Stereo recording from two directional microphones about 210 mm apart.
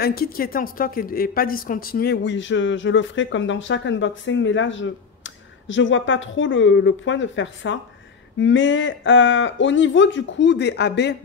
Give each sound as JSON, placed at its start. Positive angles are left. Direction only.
{"t": 0.0, "sound": "speech", "side_deg": 45}